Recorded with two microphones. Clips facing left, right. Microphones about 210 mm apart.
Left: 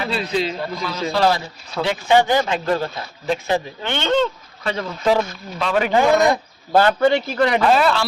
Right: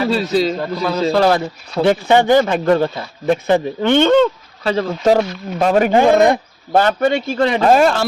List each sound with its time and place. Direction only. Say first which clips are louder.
0.0 s a man's voice: right 6 dB; 40° right (ahead or behind)
1.1 s speech: right 2 dB; 50° right (ahead or behind)
4.6 s a man's voice: right 7 dB; 35° right (ahead or behind)
4.9 s speech: right 3 dB; 45° right (ahead or behind)
6.0 s speech: right 2 dB; 30° right (ahead or behind)
7.6 s speech: right 4 dB; 45° right (ahead or behind)